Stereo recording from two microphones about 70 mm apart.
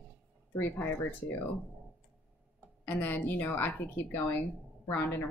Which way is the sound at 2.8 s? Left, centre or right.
Left.